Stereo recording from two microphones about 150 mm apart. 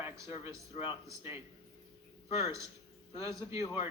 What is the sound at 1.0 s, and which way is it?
Speech, 15° right (ahead or behind).